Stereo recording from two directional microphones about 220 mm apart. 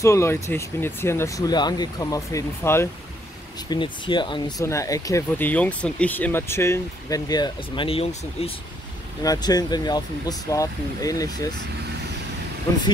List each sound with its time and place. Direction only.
0.0 s speech: 15° left (ahead or behind); by 8.5 s 30° left (ahead or behind)
9.2 s speech: 15° left (ahead or behind)